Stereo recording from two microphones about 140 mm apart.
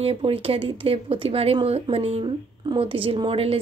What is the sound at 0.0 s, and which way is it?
Speech, 40° right (ahead or behind).